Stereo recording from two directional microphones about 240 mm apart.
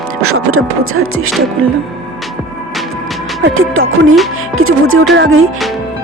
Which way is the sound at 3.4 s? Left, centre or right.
Right.